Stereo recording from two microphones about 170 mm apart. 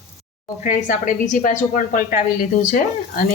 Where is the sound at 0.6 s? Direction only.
50° left (ahead or behind).